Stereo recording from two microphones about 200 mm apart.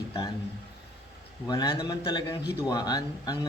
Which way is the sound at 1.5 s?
20° left (ahead or behind).